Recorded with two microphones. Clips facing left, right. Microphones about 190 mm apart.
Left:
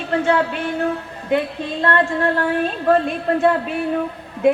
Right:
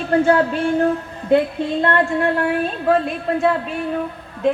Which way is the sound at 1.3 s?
25° right (ahead or behind).